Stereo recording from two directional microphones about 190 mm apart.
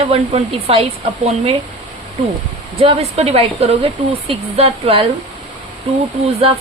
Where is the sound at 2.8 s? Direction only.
30° right (ahead or behind).